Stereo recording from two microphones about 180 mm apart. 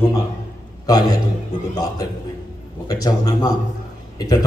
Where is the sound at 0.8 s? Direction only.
20° left (ahead or behind).